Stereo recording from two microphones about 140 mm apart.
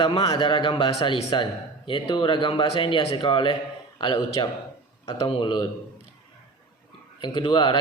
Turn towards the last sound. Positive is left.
turn(degrees=35)  # may be behind; listen again after turning